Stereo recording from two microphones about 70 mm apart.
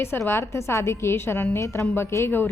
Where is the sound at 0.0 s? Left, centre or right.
Left.